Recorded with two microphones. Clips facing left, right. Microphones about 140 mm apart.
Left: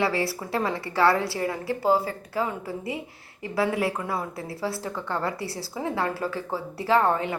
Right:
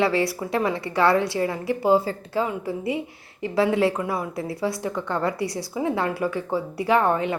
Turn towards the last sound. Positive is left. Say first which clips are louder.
# right 2 dB
turn(degrees=-20)  # may be behind; listen again after turning